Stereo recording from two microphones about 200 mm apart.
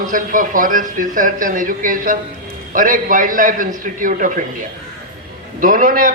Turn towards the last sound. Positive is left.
turn(degrees=-45)  # may be behind; listen again after turning